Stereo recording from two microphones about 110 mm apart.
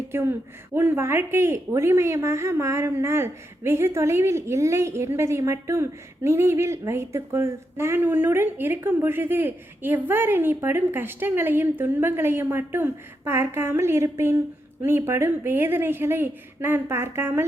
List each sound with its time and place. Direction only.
0.1 s a woman's voice: 20° right (ahead or behind)